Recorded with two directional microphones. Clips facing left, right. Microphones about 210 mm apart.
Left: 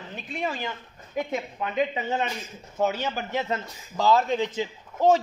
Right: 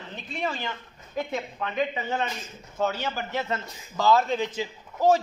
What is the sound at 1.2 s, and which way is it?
A man's voice, 15° left (ahead or behind).